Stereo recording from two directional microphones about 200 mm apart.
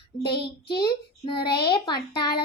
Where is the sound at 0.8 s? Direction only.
25° left (ahead or behind).